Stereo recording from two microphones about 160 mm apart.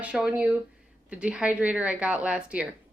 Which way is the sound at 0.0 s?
5° right (ahead or behind).